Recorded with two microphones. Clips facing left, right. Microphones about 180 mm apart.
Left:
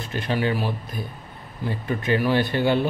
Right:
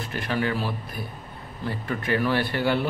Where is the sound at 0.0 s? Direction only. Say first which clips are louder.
Left 2 dB; 20° left (ahead or behind).